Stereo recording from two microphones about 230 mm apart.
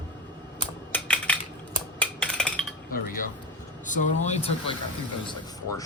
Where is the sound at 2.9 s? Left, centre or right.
Left.